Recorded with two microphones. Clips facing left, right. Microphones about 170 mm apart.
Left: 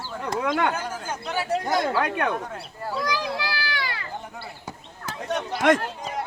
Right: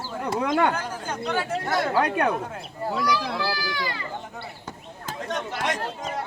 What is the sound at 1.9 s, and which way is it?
Speech, 35° right (ahead or behind).